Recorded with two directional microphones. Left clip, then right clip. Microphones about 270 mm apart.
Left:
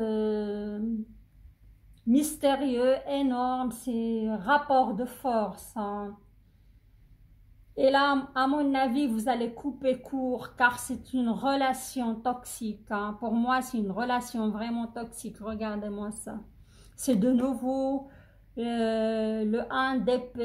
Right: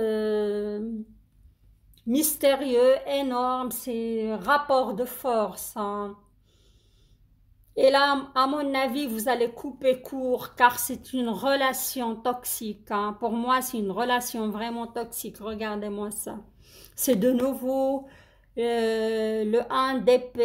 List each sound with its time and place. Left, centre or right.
0.0 s a sound: right
2.0 s speech: right
7.7 s a woman's voice: right